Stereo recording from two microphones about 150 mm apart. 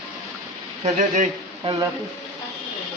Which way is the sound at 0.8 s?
55° right (ahead or behind).